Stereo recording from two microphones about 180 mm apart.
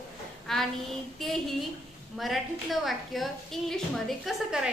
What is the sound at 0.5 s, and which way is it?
Child singing, centre (ahead or behind).